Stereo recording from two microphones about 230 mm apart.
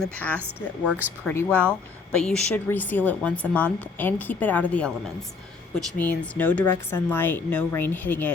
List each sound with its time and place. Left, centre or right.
0.0 s speech: centre
0.4 s speech: centre
1.2 s speech: centre
6.0 s speech: centre